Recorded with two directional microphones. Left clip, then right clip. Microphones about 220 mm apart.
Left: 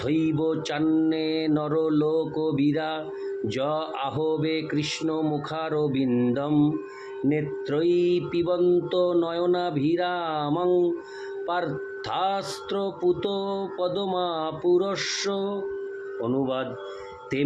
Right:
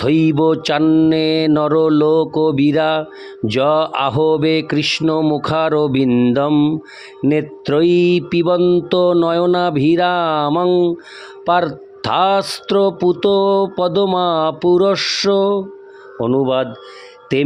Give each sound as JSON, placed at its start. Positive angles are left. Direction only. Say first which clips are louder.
{"t": 0.0, "sound": "speech", "louder": "right 11 dB", "side_deg": -50}